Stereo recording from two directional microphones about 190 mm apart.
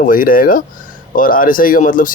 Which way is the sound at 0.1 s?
45° left (ahead or behind).